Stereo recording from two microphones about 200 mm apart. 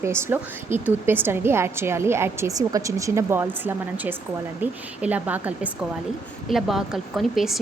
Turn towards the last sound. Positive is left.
turn(degrees=0)  # may be behind; listen again after turning